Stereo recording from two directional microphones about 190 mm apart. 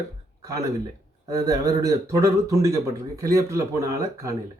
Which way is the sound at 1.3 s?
15° right (ahead or behind).